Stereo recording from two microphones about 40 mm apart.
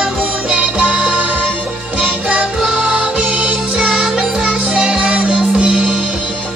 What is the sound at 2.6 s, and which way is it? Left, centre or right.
Music, right.